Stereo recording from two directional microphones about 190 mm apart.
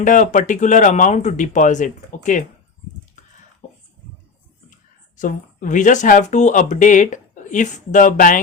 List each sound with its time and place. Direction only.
0.0 s speech: 40° left (ahead or behind)
3.6 s a sound: 40° left (ahead or behind)
4.7 s speech: 40° left (ahead or behind)